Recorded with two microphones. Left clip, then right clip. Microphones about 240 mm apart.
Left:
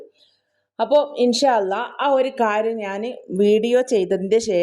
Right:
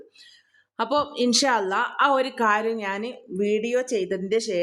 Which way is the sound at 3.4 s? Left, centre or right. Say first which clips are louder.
Left 7 dB; left.